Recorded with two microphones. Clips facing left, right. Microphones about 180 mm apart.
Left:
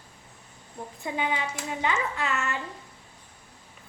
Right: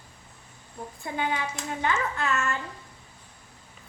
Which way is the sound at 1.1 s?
15° left (ahead or behind).